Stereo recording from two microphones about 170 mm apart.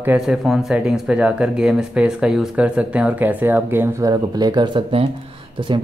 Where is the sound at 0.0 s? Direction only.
5° right (ahead or behind).